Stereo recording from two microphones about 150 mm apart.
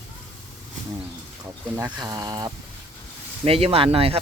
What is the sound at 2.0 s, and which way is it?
Speech, 25° right (ahead or behind).